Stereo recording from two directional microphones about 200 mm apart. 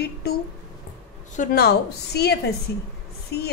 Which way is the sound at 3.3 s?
55° left (ahead or behind).